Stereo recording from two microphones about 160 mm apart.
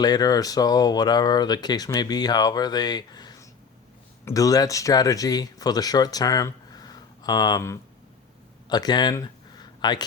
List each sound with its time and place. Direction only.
0.0 s speech: 25° left (ahead or behind)